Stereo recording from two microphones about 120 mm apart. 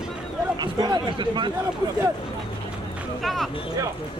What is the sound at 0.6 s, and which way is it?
Speech, 35° right (ahead or behind).